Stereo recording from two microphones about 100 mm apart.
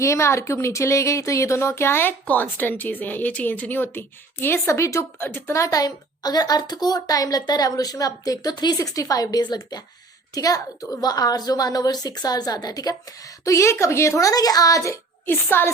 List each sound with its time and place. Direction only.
0.0 s a woman's voice: 30° left (ahead or behind)